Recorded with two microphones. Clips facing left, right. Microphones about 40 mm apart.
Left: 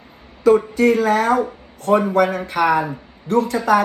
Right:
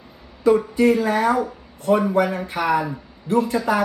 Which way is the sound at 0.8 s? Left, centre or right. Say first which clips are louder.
Left 2 dB; left.